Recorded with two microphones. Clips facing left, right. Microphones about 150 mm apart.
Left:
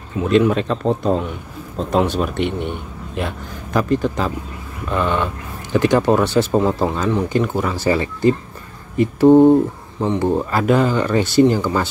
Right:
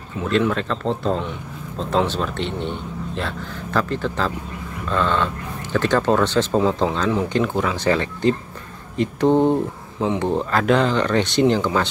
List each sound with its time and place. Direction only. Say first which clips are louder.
0.2 s speech: left 5 dB; 20° left (ahead or behind)